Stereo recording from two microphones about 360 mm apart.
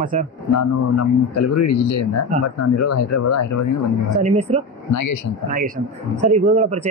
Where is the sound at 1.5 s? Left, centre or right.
Left.